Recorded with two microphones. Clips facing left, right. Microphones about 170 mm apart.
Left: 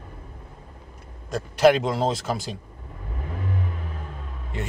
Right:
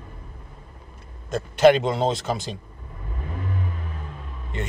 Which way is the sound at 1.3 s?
Centre (ahead or behind).